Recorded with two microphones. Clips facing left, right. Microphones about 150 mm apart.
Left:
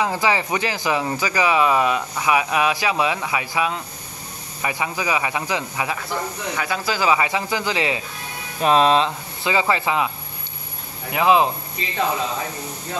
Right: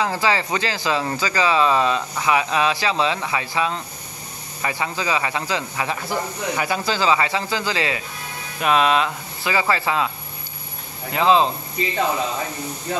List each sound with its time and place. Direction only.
0.0 s speech: 15° left (ahead or behind)
5.9 s speech: 5° right (ahead or behind)
6.9 s speech: 10° left (ahead or behind)
8.5 s speech: 35° left (ahead or behind); by 11.5 s 15° left (ahead or behind)